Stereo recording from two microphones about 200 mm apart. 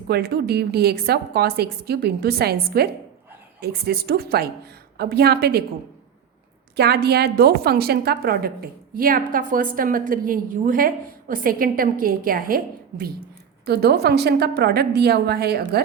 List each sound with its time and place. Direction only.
0.1 s a woman's voice: 50° right (ahead or behind)
6.7 s a woman's voice: 55° right (ahead or behind)